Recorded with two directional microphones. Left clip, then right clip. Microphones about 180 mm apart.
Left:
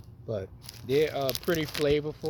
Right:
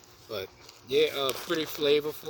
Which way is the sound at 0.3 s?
40° right (ahead or behind).